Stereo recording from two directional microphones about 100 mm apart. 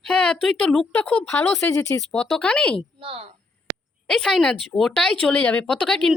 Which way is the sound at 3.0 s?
65° right (ahead or behind).